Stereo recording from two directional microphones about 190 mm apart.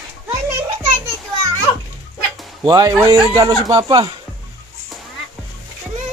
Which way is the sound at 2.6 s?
20° right (ahead or behind).